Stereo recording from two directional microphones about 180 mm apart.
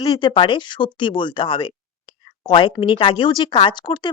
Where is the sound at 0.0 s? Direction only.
30° left (ahead or behind).